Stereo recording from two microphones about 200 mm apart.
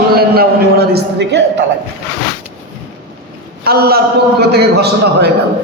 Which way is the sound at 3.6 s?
50° right (ahead or behind).